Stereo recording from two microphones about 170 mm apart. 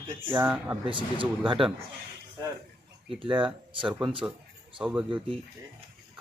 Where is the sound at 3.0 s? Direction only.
30° right (ahead or behind).